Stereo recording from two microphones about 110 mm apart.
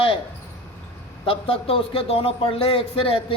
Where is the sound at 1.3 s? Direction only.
55° left (ahead or behind).